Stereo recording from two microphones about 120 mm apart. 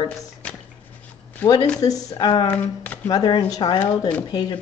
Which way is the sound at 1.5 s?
30° left (ahead or behind).